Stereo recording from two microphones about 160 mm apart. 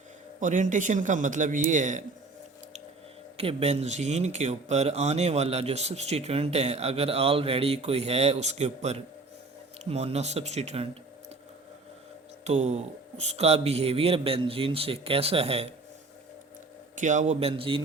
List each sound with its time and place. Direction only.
0.3 s a man's voice: 50° right (ahead or behind)
3.3 s speech: 40° right (ahead or behind)
12.5 s speech: 45° right (ahead or behind)
16.9 s a man's voice: 50° right (ahead or behind); by 17.8 s 35° right (ahead or behind)